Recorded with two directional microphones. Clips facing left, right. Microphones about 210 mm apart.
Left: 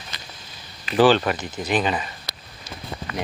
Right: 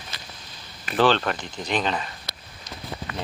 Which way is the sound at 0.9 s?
5° left (ahead or behind).